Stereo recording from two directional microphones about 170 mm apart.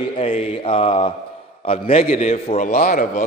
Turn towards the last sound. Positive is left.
turn(degrees=55)  # may be behind; listen again after turning